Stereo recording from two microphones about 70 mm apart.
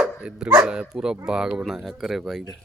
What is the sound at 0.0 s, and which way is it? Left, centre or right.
Speech, centre.